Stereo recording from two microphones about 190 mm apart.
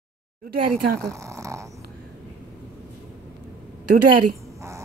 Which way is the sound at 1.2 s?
15° right (ahead or behind).